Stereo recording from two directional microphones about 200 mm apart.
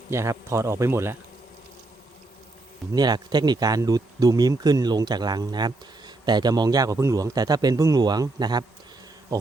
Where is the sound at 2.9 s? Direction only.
20° right (ahead or behind).